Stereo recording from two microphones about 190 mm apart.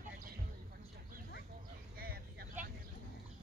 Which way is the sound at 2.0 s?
50° right (ahead or behind).